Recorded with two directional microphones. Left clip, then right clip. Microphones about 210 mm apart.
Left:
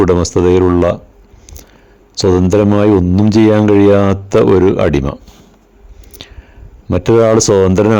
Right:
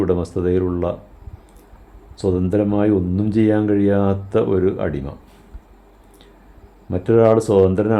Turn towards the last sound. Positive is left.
turn(degrees=40)  # may be behind; listen again after turning